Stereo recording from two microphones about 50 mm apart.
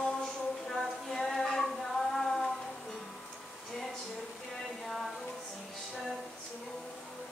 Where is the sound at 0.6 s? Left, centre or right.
Centre.